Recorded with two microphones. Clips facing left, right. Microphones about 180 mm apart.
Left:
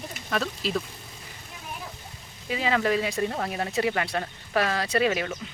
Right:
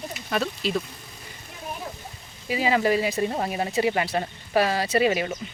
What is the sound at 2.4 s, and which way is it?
Speech, 5° right (ahead or behind).